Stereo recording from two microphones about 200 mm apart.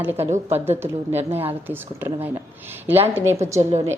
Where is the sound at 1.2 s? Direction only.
30° right (ahead or behind).